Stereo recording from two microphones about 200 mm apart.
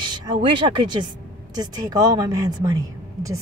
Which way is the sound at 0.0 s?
25° right (ahead or behind).